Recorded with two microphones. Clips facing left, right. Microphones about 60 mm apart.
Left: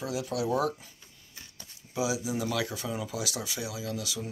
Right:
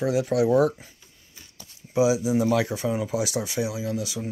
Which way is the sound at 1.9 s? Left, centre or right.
Right.